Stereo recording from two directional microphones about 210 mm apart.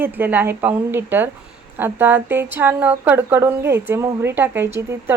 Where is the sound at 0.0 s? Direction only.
10° right (ahead or behind).